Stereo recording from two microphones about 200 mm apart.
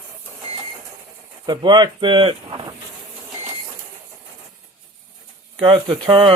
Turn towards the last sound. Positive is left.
turn(degrees=-25)  # may be behind; listen again after turning